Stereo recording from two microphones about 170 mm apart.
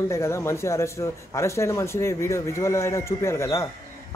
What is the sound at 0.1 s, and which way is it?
A man's voice, 15° left (ahead or behind).